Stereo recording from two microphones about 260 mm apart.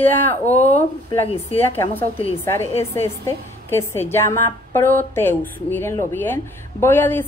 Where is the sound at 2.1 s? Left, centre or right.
Left.